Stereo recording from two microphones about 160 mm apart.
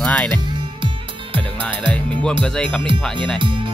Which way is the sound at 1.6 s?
10° left (ahead or behind).